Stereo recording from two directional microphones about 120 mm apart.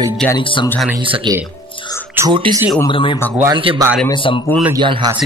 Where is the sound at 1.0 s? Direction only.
45° right (ahead or behind).